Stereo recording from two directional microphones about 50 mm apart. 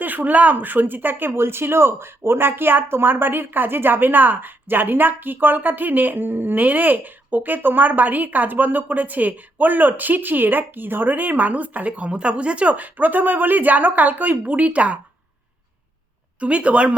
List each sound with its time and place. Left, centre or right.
0.0 s speech: right
16.4 s speech: right